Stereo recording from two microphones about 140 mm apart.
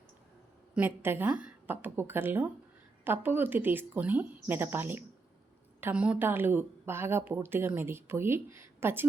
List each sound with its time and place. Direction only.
0.7 s speech: 10° right (ahead or behind)